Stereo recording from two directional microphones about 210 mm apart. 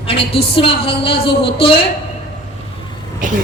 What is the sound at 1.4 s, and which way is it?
Speech, 25° left (ahead or behind).